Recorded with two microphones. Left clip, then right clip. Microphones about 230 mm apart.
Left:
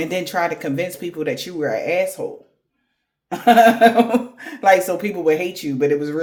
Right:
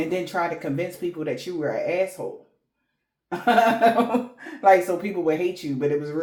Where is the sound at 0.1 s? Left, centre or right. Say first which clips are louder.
Left 4 dB; left.